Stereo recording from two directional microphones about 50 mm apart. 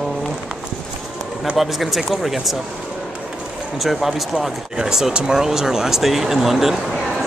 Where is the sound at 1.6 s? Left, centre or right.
Centre.